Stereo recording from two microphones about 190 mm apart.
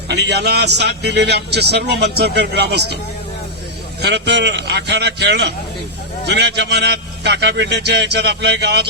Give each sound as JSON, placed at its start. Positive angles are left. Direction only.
{"t": 0.1, "sound": "a man's voice", "side_deg": -60}
{"t": 4.0, "sound": "a man's voice", "side_deg": -60}